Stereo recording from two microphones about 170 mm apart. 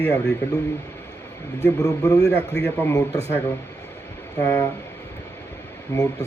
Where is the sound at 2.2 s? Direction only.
80° left.